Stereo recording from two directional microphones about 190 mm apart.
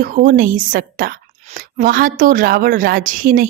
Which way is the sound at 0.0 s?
45° right (ahead or behind).